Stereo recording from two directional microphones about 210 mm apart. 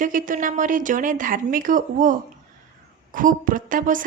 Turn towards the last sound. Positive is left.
turn(degrees=-40)  # may be behind; listen again after turning